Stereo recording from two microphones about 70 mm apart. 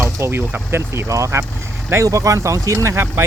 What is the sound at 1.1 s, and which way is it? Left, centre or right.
Speech, right.